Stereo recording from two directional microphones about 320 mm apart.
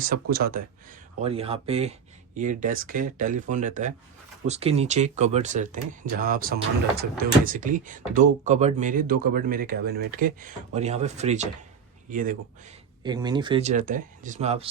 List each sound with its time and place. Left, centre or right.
0.0 s speech: right
1.2 s speech: centre
13.0 s speech: centre